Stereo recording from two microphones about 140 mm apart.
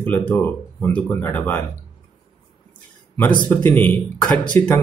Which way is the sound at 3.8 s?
10° left (ahead or behind).